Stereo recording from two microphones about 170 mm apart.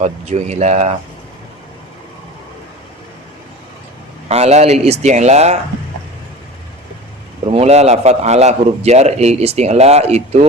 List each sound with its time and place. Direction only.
0.0 s a man's voice: 40° right (ahead or behind)
4.3 s a man's voice: 40° right (ahead or behind)
7.4 s a man's voice: 40° right (ahead or behind)